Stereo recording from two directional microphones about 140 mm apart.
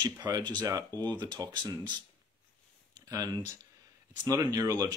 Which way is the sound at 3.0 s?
25° right (ahead or behind).